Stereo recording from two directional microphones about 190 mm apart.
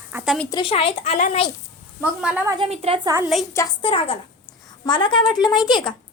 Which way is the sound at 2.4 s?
25° right (ahead or behind).